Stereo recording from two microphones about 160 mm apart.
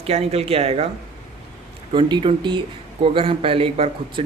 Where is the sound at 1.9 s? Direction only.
30° right (ahead or behind).